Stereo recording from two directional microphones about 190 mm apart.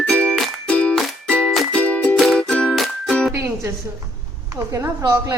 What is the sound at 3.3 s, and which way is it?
Music, 15° right (ahead or behind).